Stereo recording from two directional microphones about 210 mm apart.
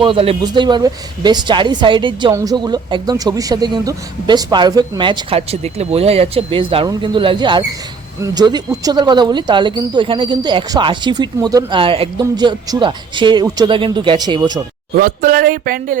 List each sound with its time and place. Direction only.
0.0 s speech: 25° right (ahead or behind)
14.9 s speech: 45° right (ahead or behind)